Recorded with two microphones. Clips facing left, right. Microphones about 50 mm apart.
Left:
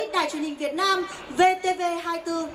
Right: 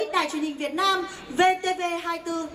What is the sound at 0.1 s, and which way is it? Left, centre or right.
A child's voice, right.